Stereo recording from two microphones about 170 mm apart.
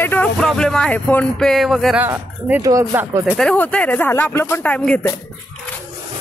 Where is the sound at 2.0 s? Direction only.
15° right (ahead or behind).